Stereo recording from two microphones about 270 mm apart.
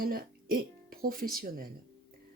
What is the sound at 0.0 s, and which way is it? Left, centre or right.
Speech, right.